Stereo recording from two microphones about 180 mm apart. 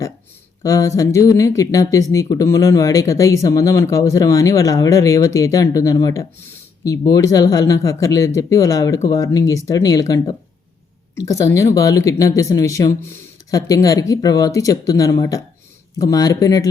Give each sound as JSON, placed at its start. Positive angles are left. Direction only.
{"t": 0.6, "sound": "speech", "side_deg": 15}
{"t": 11.3, "sound": "speech", "side_deg": 15}